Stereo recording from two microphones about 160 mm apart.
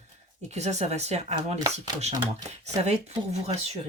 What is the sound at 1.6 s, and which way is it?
Speech, 25° right (ahead or behind).